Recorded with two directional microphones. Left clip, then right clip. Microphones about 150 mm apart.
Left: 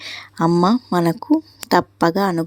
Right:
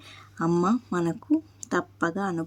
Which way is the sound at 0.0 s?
35° left (ahead or behind).